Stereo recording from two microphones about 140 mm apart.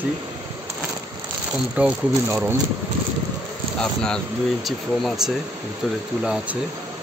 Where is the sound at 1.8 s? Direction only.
10° right (ahead or behind).